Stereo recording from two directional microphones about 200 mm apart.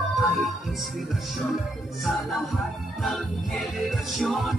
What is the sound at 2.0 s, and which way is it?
Music, centre (ahead or behind).